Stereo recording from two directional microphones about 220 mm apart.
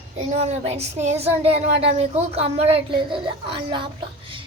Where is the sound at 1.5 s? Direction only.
30° right (ahead or behind).